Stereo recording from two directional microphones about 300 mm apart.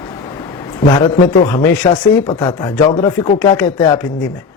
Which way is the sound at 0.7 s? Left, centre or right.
Centre.